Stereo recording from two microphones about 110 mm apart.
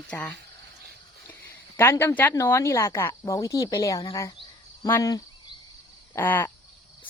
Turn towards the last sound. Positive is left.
turn(degrees=15)  # may be behind; listen again after turning